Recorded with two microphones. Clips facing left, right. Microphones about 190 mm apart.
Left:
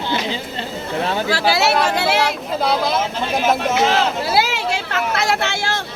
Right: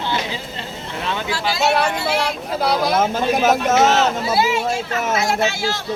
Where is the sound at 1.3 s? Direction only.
70° left (ahead or behind).